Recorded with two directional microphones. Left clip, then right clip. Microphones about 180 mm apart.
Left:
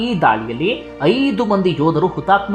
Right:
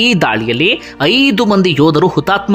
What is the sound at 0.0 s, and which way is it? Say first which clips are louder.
A woman's voice: right 3 dB; 30° right (ahead or behind).